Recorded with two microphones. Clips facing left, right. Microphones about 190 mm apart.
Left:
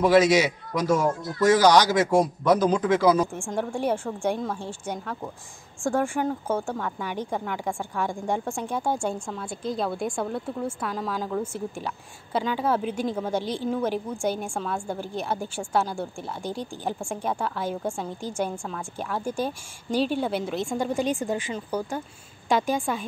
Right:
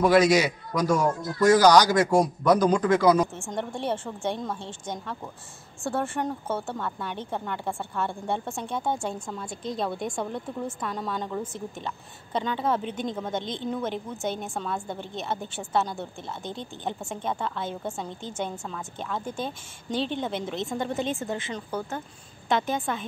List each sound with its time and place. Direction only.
0.0 s a woman's voice: centre (ahead or behind)